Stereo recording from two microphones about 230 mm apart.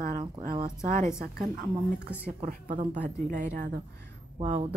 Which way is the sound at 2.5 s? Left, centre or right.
Right.